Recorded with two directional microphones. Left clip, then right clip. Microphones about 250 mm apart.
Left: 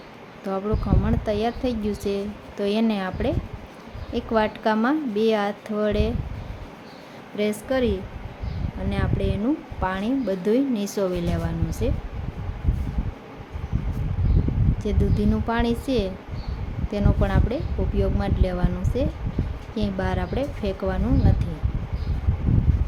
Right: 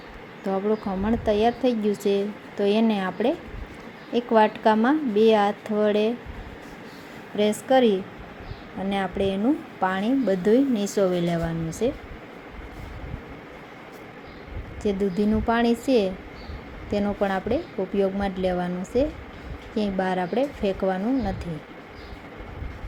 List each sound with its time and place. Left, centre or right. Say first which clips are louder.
0.4 s a woman's voice: right 2 dB; centre
7.4 s a woman's voice: right 4 dB; centre
14.8 s a woman's voice: right 3 dB; centre